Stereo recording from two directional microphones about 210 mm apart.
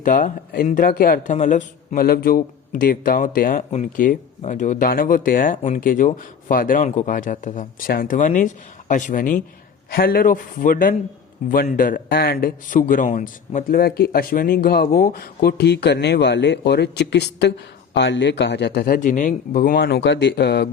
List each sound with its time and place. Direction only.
0.0 s speech: 40° left (ahead or behind)